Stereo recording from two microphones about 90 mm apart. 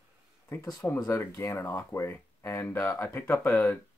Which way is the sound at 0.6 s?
45° left (ahead or behind).